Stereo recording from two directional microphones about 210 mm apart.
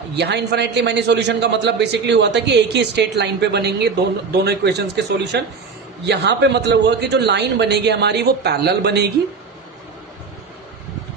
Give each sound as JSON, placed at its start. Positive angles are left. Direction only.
{"t": 0.2, "sound": "a man's voice", "side_deg": -55}